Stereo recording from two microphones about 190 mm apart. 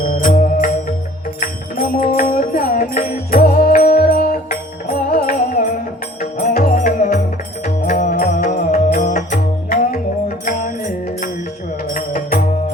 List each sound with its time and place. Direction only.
0.0 s music: 50° left (ahead or behind)